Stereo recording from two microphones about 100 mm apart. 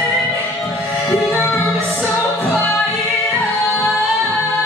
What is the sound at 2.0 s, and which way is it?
Music, 25° left (ahead or behind).